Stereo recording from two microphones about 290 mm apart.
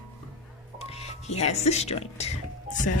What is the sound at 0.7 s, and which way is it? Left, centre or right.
Music, left.